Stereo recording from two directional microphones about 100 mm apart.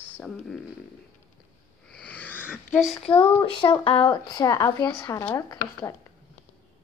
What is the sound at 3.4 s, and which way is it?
Speech, 55° left (ahead or behind).